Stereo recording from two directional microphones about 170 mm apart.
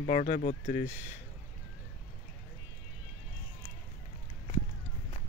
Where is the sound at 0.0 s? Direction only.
50° left (ahead or behind).